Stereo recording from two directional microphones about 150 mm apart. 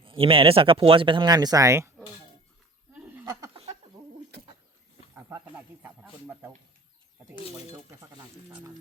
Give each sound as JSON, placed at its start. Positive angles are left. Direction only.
{"t": 0.0, "sound": "speech", "side_deg": -35}
{"t": 5.8, "sound": "speech", "side_deg": -15}